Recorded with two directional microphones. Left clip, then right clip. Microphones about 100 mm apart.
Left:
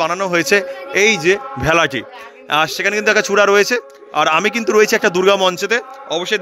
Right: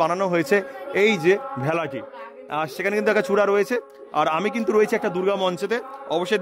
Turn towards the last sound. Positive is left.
turn(degrees=-35)  # may be behind; listen again after turning